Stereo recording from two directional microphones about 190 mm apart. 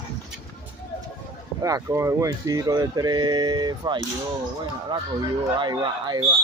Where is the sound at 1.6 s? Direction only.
15° right (ahead or behind).